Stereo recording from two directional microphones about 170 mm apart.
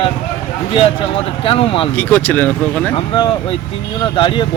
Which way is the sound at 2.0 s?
10° left (ahead or behind).